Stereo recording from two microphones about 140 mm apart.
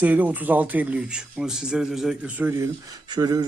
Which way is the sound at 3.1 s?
30° right (ahead or behind).